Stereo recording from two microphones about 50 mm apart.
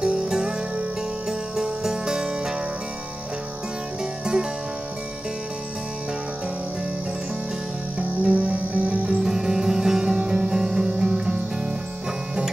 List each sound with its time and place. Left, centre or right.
0.0 s music: right
4.0 s music: centre
8.0 s music: right
9.2 s music: centre